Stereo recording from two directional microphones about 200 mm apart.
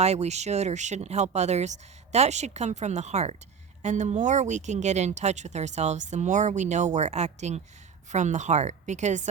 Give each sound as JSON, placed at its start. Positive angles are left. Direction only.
{"t": 0.0, "sound": "speech", "side_deg": -35}